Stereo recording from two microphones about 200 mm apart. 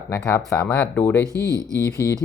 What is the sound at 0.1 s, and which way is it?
Speech, 10° left (ahead or behind).